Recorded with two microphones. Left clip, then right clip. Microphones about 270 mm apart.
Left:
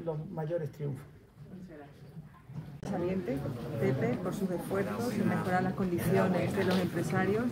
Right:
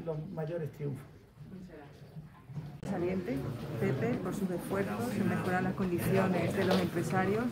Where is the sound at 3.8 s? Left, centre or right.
Centre.